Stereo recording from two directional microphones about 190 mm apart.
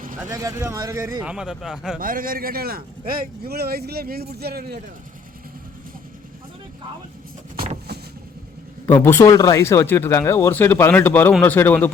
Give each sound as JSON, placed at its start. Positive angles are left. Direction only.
{"t": 0.3, "sound": "speech", "side_deg": -15}
{"t": 1.2, "sound": "a man's voice", "side_deg": -5}
{"t": 2.0, "sound": "speech", "side_deg": -45}
{"t": 8.9, "sound": "speech", "side_deg": 10}